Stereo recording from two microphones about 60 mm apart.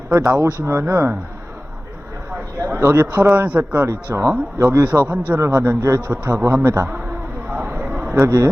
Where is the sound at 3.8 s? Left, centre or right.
Right.